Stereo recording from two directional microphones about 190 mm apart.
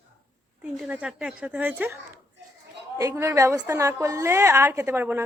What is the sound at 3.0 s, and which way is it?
A woman's voice, 15° right (ahead or behind).